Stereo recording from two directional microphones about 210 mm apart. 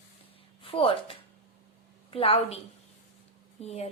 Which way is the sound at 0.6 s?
25° left (ahead or behind).